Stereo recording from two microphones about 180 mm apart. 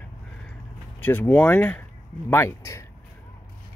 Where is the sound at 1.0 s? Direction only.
10° left (ahead or behind).